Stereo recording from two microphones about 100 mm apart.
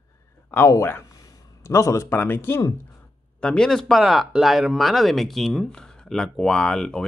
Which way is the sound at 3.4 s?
10° left (ahead or behind).